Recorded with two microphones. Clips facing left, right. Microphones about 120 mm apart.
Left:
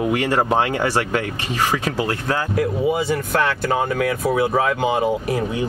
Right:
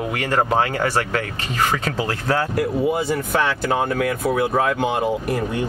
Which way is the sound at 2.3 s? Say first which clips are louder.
Right 2 dB; centre (ahead or behind).